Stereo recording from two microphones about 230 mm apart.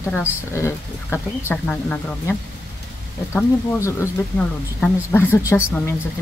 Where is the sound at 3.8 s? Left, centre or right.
Centre.